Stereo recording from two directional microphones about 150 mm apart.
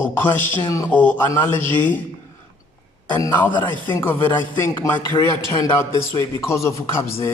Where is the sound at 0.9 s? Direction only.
10° left (ahead or behind).